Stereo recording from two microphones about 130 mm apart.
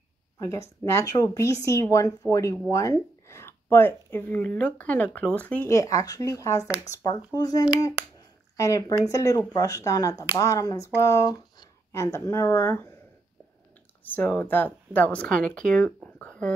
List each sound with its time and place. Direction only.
0.4 s a woman's voice: 25° left (ahead or behind)
5.7 s a woman's voice: 25° left (ahead or behind)
14.0 s speech: 15° left (ahead or behind)
16.2 s a sound: 10° left (ahead or behind)